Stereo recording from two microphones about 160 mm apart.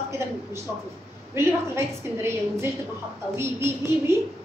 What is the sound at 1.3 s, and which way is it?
A woman's voice, 15° right (ahead or behind).